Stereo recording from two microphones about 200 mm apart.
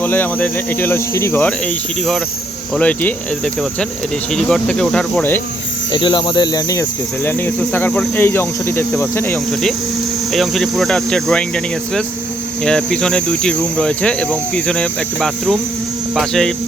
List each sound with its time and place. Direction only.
0.0 s cricket: 10° left (ahead or behind)
2.7 s cricket: 10° left (ahead or behind)
5.9 s speech: 25° left (ahead or behind)
7.3 s cricket: 10° left (ahead or behind)